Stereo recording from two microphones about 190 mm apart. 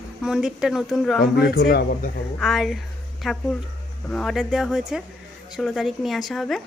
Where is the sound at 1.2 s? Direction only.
55° left (ahead or behind).